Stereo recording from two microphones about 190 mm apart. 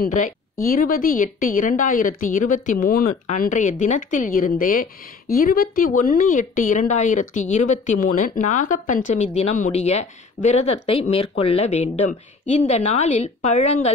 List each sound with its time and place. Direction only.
0.0 s a woman's voice: 45° left (ahead or behind)